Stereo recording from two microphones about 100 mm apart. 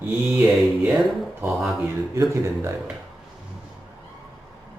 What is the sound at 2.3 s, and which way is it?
Speech, 30° right (ahead or behind).